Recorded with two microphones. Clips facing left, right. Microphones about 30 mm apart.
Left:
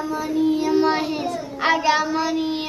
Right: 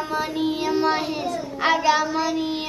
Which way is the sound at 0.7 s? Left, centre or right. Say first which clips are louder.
Left 2 dB; centre.